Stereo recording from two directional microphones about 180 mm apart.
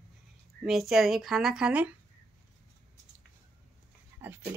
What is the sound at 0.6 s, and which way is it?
A woman's voice, centre (ahead or behind).